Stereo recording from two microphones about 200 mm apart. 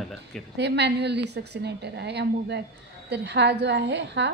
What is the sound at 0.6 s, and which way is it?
A woman's voice, 55° right (ahead or behind).